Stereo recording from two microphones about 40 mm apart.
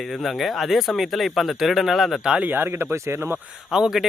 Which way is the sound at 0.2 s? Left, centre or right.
Centre.